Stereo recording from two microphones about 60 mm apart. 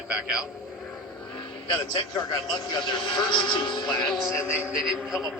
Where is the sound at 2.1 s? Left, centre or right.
Left.